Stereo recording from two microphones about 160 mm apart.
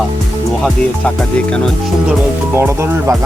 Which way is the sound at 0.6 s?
5° left (ahead or behind).